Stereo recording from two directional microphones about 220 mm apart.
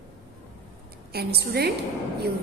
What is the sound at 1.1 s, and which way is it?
Speech, 45° right (ahead or behind).